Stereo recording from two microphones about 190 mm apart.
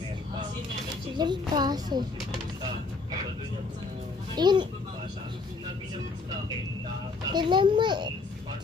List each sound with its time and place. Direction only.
1.1 s a child's voice: 20° right (ahead or behind)
4.4 s a child's voice: 25° right (ahead or behind)
7.3 s a child's voice: 25° right (ahead or behind)